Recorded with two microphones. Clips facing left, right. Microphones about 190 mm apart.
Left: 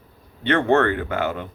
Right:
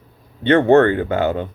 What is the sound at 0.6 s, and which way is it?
Speech, 35° right (ahead or behind).